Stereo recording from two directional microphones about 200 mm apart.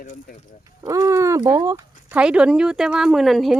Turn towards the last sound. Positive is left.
turn(degrees=0)  # may be behind; listen again after turning